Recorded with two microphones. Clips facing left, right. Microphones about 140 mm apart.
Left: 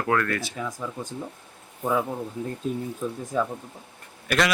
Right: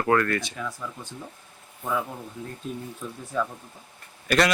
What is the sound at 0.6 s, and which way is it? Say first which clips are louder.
Speech: left 2 dB; 15° left (ahead or behind).